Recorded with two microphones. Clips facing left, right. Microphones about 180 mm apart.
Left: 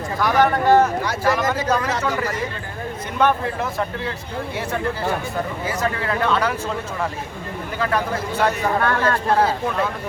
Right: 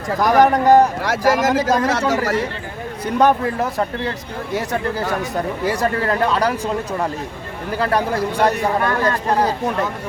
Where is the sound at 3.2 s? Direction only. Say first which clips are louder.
Right 4 dB; 35° right (ahead or behind).